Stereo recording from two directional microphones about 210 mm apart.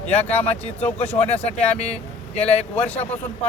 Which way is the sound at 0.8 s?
10° left (ahead or behind).